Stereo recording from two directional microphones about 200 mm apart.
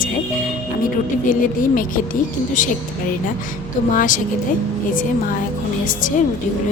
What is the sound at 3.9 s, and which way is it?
Speech, 40° left (ahead or behind).